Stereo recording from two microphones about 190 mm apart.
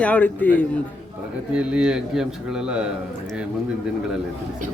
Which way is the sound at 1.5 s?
5° right (ahead or behind).